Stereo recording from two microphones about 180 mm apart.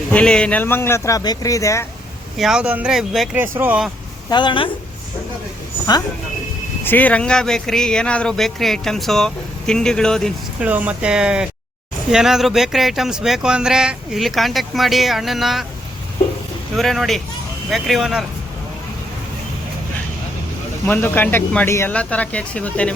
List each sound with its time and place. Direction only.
0.1 s speech: 5° left (ahead or behind)
2.4 s speech: 5° right (ahead or behind)
4.3 s a woman's voice: 25° left (ahead or behind)
6.8 s speech: 10° left (ahead or behind)
10.7 s speech: 10° right (ahead or behind)
16.7 s speech: centre (ahead or behind)
20.8 s speech: 10° left (ahead or behind)